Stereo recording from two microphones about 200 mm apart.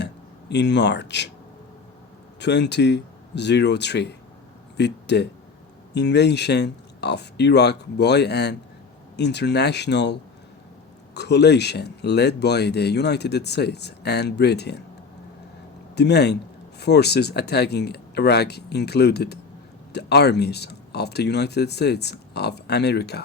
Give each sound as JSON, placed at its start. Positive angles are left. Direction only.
{"t": 0.0, "sound": "speech", "side_deg": 60}
{"t": 2.4, "sound": "speech", "side_deg": 60}
{"t": 16.0, "sound": "speech", "side_deg": 55}